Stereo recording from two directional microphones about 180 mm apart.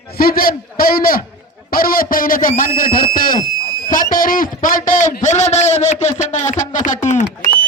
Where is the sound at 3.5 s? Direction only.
20° right (ahead or behind).